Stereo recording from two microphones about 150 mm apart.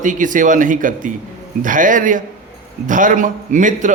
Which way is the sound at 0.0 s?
60° right (ahead or behind).